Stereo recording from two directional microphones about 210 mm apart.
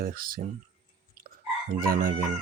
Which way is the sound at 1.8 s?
45° right (ahead or behind).